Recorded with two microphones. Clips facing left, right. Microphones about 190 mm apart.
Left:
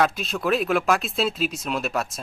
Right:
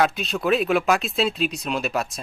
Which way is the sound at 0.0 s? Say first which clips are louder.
Right 1 dB; centre (ahead or behind).